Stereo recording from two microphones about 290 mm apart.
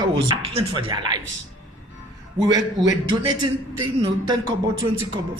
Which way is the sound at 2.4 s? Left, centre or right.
Centre.